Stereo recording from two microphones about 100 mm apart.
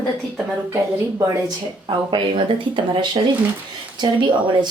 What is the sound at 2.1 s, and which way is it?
Speech, 55° right (ahead or behind).